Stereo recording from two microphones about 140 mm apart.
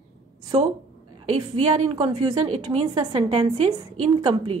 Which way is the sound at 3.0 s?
35° right (ahead or behind).